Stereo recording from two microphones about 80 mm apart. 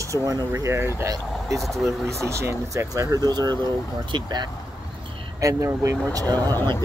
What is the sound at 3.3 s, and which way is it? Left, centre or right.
Speech, right.